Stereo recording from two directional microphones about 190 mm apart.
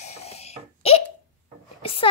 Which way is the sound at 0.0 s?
35° left (ahead or behind).